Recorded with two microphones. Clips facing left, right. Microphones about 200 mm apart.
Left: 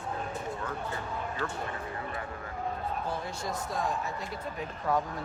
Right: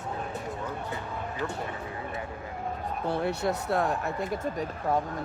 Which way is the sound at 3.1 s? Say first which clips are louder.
Right 7 dB; 65° right (ahead or behind).